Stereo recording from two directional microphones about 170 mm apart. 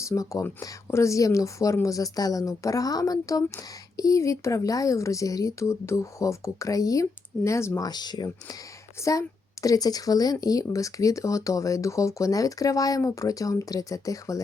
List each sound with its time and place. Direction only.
0.0 s a woman's voice: 20° left (ahead or behind)